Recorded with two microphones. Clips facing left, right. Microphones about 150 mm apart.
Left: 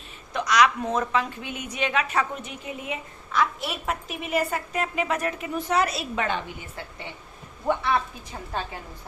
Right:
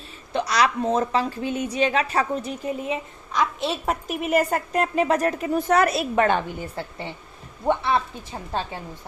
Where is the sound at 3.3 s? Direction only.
20° right (ahead or behind).